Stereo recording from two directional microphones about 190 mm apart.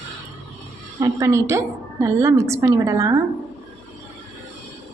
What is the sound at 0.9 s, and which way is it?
A woman's voice, 15° right (ahead or behind).